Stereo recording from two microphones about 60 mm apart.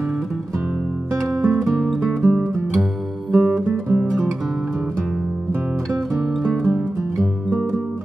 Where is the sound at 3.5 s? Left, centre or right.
Centre.